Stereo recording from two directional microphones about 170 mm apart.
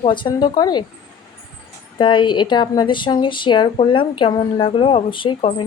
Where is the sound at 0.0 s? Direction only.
30° left (ahead or behind).